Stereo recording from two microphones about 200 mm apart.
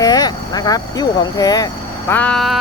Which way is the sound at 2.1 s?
5° left (ahead or behind).